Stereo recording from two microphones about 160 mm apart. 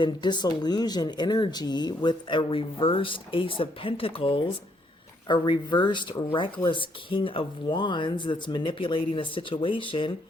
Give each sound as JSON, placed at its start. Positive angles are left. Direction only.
{"t": 0.0, "sound": "speech", "side_deg": 30}